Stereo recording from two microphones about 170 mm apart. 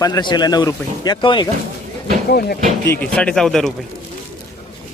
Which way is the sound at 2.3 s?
65° left (ahead or behind).